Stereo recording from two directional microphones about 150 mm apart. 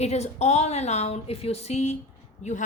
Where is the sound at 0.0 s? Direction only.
45° left (ahead or behind).